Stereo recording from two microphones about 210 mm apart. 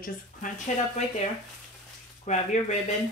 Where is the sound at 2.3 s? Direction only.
35° left (ahead or behind).